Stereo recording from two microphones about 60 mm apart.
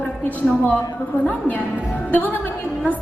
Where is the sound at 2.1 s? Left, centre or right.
Left.